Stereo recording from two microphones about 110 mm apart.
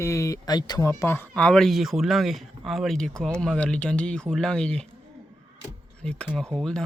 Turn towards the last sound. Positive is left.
turn(degrees=0)  # may be behind; listen again after turning